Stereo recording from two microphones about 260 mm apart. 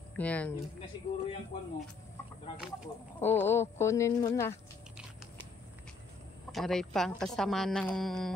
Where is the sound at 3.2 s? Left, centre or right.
Centre.